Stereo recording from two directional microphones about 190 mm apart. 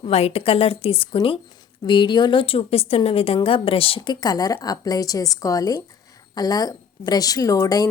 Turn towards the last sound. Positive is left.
turn(degrees=20)  # may be behind; listen again after turning